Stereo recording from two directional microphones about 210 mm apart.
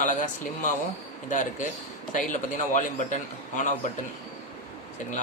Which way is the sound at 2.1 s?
40° left (ahead or behind).